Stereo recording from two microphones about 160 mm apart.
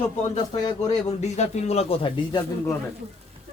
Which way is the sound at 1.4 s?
40° left (ahead or behind).